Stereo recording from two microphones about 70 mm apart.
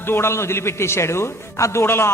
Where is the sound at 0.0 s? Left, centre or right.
Left.